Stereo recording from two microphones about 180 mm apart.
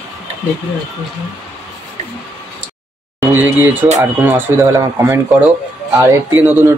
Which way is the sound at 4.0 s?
15° right (ahead or behind).